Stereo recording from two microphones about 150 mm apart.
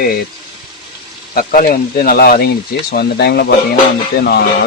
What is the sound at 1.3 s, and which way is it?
Speech, 70° left (ahead or behind).